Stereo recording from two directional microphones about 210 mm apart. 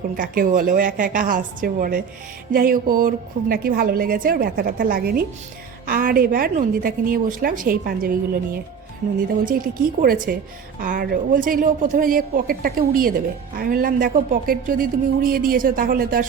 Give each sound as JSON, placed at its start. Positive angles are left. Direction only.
{"t": 0.2, "sound": "a woman's voice", "side_deg": -40}